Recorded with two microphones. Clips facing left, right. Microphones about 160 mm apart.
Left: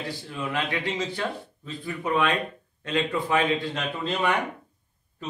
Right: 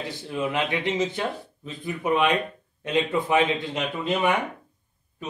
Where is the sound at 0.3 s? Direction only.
20° right (ahead or behind).